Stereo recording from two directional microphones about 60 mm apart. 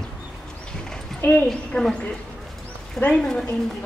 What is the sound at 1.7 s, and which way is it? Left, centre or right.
Speech, centre.